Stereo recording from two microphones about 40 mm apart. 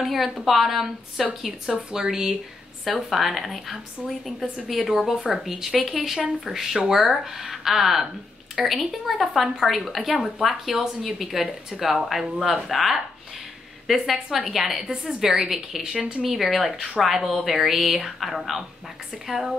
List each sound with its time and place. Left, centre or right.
0.0 s speech: centre
1.7 s speech: centre
3.1 s a woman's voice: centre
14.8 s speech: centre
16.3 s speech: centre